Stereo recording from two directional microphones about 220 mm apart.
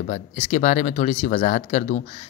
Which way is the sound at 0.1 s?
35° left (ahead or behind).